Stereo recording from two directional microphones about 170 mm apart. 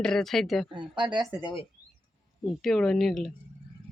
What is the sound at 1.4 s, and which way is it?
Speech, 30° left (ahead or behind).